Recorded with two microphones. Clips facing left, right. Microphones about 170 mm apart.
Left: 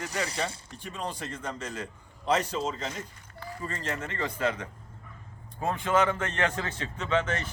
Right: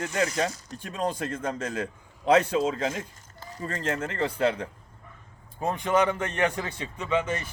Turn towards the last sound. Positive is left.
turn(degrees=-10)  # may be behind; listen again after turning